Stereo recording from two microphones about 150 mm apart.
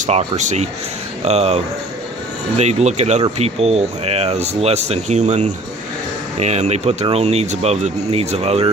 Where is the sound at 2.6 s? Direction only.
50° right (ahead or behind).